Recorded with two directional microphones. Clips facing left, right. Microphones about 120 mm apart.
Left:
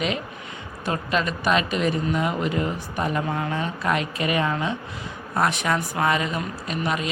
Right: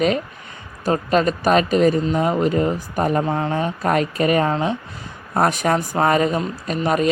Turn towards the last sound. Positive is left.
turn(degrees=-40)  # may be behind; listen again after turning